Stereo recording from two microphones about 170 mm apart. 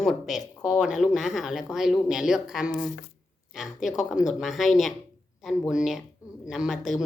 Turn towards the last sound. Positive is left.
turn(degrees=0)  # may be behind; listen again after turning